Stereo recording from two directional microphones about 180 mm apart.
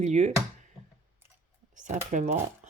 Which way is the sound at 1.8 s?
45° right (ahead or behind).